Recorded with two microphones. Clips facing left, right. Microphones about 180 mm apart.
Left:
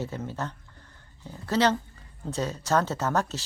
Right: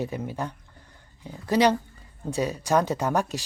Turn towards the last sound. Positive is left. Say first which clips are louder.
# right 2 dB
turn(degrees=-15)  # may be behind; listen again after turning